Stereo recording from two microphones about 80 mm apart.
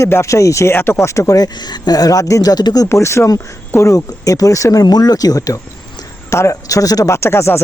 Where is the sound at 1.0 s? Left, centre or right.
Left.